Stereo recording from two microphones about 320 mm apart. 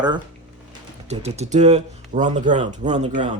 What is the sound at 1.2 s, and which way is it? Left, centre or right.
Speech, right.